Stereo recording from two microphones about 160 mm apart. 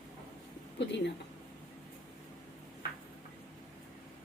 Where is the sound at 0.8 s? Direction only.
90° left.